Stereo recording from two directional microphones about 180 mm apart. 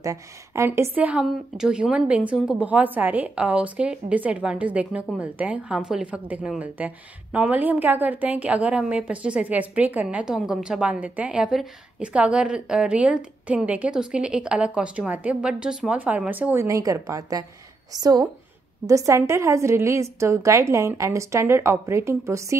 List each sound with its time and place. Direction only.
0.0 s a woman's voice: 15° right (ahead or behind)